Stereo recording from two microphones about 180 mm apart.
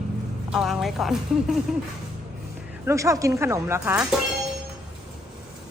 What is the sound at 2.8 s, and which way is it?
Speech, 15° right (ahead or behind).